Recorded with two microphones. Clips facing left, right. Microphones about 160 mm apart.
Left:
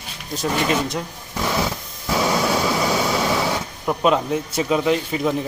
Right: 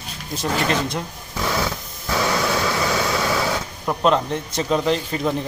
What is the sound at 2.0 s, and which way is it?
Vehicle, 15° left (ahead or behind).